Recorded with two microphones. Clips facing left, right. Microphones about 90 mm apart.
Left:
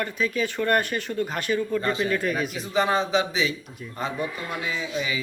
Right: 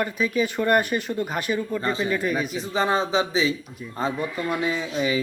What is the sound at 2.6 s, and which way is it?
Speech, 30° right (ahead or behind).